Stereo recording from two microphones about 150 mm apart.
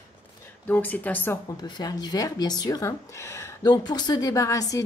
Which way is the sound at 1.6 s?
25° left (ahead or behind).